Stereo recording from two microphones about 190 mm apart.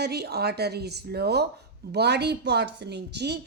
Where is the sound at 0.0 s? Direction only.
60° right (ahead or behind).